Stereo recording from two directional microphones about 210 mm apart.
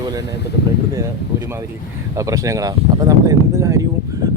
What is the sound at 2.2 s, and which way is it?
Speech, 15° right (ahead or behind).